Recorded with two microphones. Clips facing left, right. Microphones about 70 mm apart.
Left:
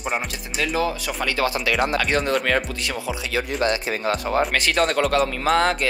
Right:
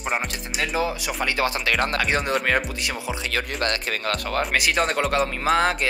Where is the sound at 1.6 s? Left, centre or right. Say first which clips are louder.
Left 2 dB; right.